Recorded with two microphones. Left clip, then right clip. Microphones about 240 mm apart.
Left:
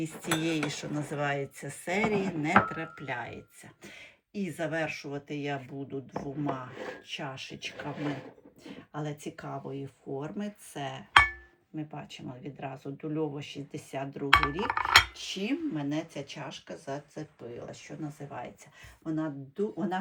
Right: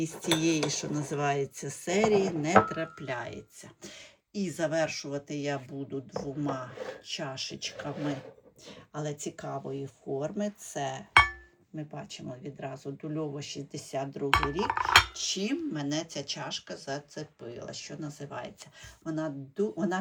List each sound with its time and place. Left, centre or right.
0.0 s dishes: centre
6.7 s speech: right
7.1 s dishes: centre
7.9 s speech: right
8.6 s dishes: centre